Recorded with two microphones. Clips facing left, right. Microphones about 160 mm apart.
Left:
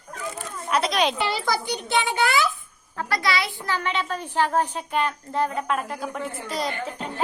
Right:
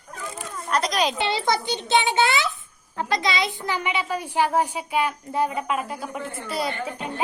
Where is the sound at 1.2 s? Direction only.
20° right (ahead or behind).